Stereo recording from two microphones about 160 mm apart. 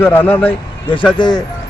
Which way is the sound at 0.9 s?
30° left (ahead or behind).